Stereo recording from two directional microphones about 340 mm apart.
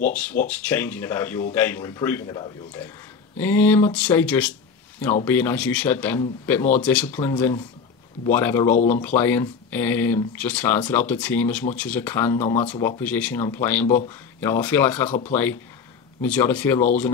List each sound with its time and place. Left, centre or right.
0.0 s speech: centre
16.2 s speech: centre